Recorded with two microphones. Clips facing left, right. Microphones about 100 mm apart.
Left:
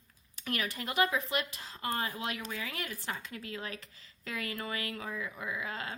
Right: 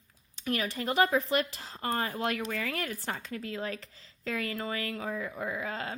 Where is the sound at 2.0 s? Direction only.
50° right (ahead or behind).